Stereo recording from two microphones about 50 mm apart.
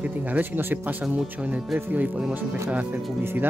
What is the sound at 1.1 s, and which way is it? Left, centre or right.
Speech, right.